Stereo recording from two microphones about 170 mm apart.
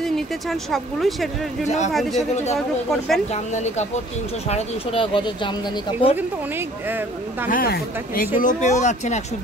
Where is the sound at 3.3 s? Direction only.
45° left (ahead or behind).